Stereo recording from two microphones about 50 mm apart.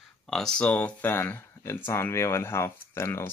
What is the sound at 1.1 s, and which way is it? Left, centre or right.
Speech, left.